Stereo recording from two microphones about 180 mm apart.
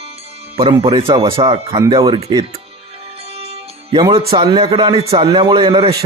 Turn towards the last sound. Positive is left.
turn(degrees=-30)  # may be behind; listen again after turning